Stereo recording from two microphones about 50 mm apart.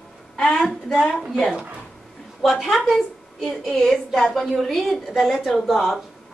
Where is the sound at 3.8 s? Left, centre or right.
Centre.